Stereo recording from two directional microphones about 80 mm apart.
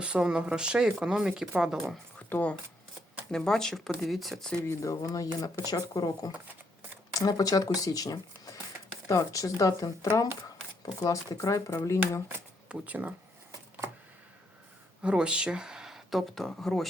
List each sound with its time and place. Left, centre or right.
0.0 s speech: centre
2.1 s a sound: centre
3.3 s speech: centre
4.8 s speech: left
7.1 s speech: left
12.6 s speech: centre
15.0 s speech: centre